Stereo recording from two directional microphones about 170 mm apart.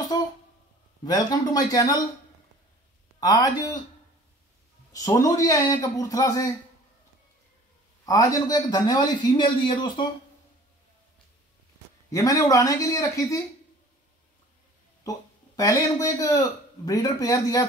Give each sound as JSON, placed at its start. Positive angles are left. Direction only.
{"t": 0.1, "sound": "a sound", "side_deg": 25}
{"t": 1.0, "sound": "speech", "side_deg": 20}
{"t": 3.2, "sound": "speech", "side_deg": 20}
{"t": 4.9, "sound": "speech", "side_deg": 20}
{"t": 8.0, "sound": "speech", "side_deg": 20}
{"t": 12.1, "sound": "speech", "side_deg": 20}
{"t": 15.0, "sound": "speech", "side_deg": 20}